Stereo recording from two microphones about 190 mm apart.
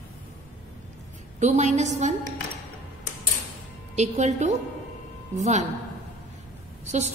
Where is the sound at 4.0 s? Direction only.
35° right (ahead or behind).